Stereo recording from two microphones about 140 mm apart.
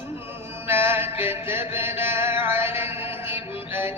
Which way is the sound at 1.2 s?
15° right (ahead or behind).